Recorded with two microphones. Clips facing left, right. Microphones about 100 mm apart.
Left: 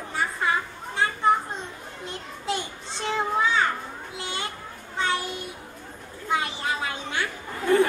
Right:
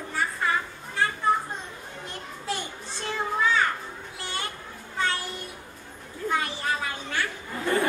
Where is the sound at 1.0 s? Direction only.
20° left (ahead or behind).